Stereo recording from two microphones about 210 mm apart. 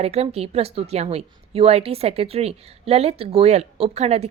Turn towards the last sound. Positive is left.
turn(degrees=-30)  # may be behind; listen again after turning